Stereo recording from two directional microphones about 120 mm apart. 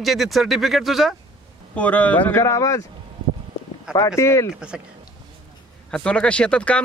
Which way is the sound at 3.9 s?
25° left (ahead or behind).